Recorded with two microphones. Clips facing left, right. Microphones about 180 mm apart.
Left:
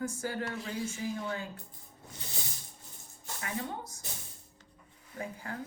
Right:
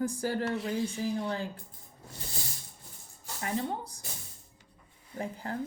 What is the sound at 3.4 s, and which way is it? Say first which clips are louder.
Speech: right 5 dB; 35° right (ahead or behind).